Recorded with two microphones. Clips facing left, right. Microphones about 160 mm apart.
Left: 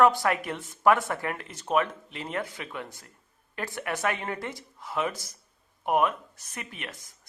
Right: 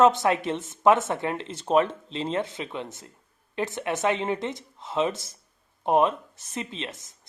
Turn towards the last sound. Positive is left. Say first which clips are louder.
# right 5 dB
turn(degrees=-20)  # may be behind; listen again after turning